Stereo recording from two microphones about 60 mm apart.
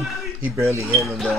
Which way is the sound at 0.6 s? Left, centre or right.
Right.